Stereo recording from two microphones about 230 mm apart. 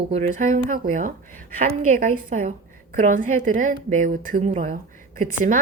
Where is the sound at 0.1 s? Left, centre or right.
Right.